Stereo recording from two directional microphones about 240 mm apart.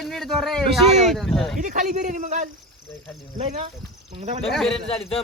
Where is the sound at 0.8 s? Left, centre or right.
Right.